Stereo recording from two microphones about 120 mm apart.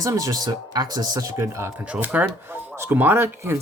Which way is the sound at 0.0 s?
30° right (ahead or behind).